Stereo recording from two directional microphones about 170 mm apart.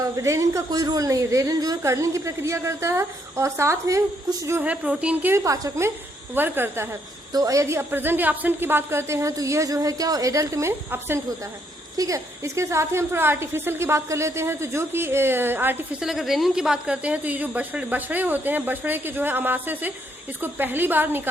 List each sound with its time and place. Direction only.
0.0 s a woman's voice: 20° right (ahead or behind)